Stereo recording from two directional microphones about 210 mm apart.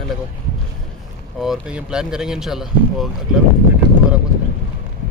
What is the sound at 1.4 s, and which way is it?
Speech, 5° right (ahead or behind).